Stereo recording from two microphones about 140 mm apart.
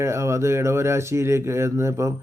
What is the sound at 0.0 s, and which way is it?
Speech, 20° right (ahead or behind).